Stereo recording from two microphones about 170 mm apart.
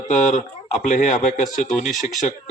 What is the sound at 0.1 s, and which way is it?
Speech, 45° left (ahead or behind).